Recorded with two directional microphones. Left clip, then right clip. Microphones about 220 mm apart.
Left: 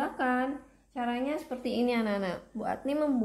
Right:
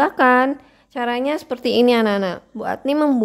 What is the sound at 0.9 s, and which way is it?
A woman's voice, 45° right (ahead or behind).